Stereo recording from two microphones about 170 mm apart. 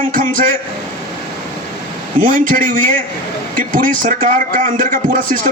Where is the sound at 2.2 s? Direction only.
50° right (ahead or behind).